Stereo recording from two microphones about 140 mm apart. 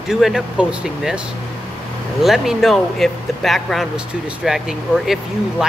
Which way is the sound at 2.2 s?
Centre (ahead or behind).